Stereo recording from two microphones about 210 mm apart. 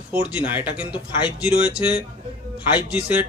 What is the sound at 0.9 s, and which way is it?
Speech, 20° left (ahead or behind).